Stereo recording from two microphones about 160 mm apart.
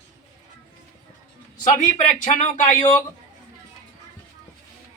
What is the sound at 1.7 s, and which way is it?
A man's voice, 50° left (ahead or behind).